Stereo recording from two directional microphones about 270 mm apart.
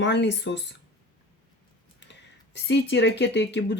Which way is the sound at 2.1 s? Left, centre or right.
Left.